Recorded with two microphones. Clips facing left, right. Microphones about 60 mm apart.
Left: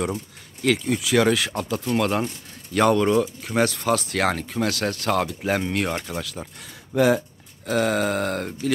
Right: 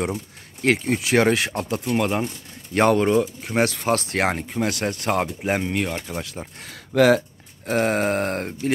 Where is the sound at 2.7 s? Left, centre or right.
Right.